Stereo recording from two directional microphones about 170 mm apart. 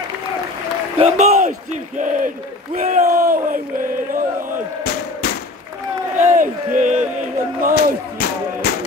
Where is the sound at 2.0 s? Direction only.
50° right (ahead or behind).